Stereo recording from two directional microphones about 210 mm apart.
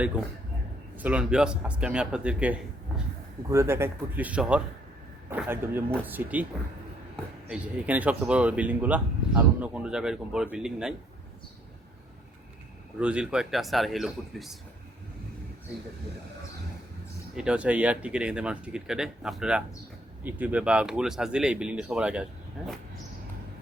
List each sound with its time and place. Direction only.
0.9 s speech: 5° right (ahead or behind)
7.5 s speech: 5° right (ahead or behind)
13.0 s speech: 5° right (ahead or behind)
17.3 s speech: 5° right (ahead or behind)